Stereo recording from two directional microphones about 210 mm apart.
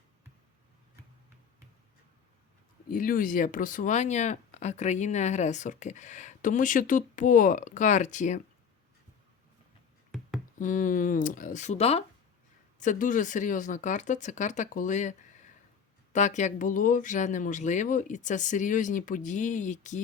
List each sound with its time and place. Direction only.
2.9 s speech: 40° left (ahead or behind)
10.1 s music: centre (ahead or behind)
10.6 s speech: 40° left (ahead or behind)
16.1 s speech: 35° left (ahead or behind)